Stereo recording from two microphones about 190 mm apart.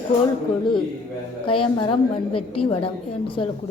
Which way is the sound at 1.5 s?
30° left (ahead or behind).